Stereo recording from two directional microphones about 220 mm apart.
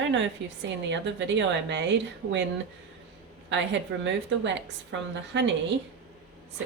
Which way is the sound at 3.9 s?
65° right (ahead or behind).